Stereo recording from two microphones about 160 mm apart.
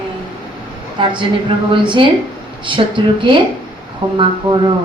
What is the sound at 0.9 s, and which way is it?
A woman's voice, 30° right (ahead or behind).